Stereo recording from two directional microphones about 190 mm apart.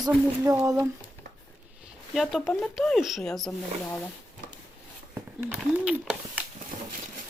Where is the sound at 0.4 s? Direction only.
15° right (ahead or behind).